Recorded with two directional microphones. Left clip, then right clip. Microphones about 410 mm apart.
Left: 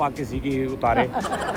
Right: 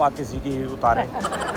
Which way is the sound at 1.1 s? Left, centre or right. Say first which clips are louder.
Even; centre.